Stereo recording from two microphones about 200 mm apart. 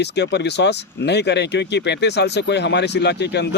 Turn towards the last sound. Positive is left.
turn(degrees=55)  # may be behind; listen again after turning